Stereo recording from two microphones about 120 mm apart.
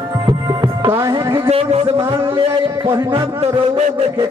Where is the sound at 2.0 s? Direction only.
20° right (ahead or behind).